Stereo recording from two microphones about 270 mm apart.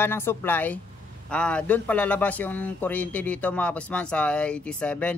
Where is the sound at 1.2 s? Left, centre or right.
Centre.